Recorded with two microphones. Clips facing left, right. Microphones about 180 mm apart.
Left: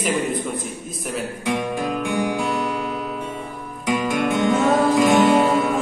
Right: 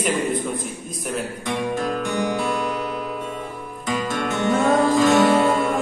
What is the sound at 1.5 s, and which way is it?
Music, 10° left (ahead or behind).